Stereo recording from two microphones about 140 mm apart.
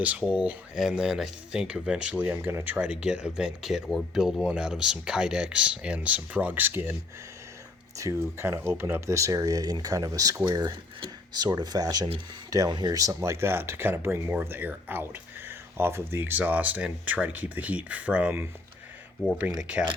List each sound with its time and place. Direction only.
0.0 s speech: 10° right (ahead or behind)
7.9 s speech: 20° right (ahead or behind)